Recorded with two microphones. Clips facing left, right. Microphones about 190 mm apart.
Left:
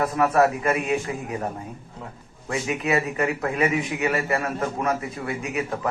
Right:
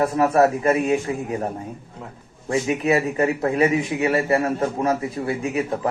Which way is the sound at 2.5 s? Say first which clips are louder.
Right 4 dB; 30° right (ahead or behind).